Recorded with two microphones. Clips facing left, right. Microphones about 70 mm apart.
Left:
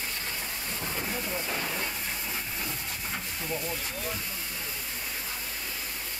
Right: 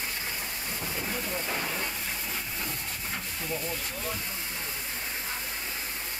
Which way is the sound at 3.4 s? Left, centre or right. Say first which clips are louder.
Even; centre.